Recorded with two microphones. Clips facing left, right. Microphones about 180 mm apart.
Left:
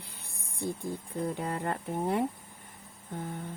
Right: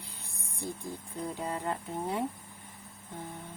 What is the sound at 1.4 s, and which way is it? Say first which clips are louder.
Speech: left 1 dB; 55° left (ahead or behind).